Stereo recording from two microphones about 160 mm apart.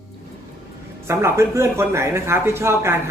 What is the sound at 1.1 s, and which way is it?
Speech, 15° right (ahead or behind).